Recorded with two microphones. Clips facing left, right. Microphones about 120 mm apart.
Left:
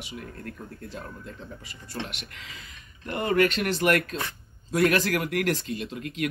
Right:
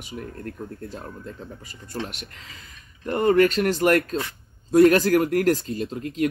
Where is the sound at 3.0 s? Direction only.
45° right (ahead or behind).